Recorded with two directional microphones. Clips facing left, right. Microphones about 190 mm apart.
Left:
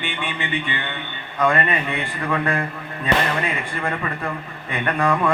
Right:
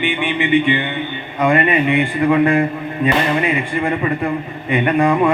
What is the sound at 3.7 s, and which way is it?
Speech, 20° right (ahead or behind).